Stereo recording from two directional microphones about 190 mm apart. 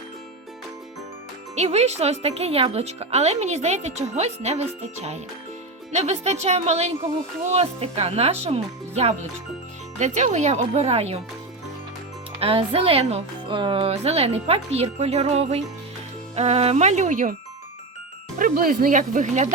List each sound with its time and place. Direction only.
1.5 s speech: 35° right (ahead or behind)
12.4 s speech: 30° right (ahead or behind)
18.3 s speech: 45° right (ahead or behind)